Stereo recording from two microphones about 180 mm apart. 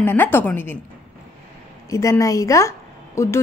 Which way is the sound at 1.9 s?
15° left (ahead or behind).